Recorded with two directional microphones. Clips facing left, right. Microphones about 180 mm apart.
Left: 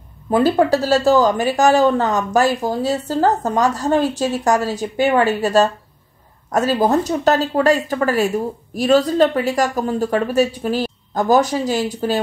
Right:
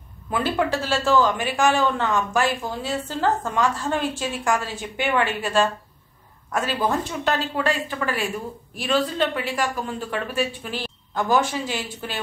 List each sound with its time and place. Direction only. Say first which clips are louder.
0.3 s speech: left 8 dB; 40° left (ahead or behind)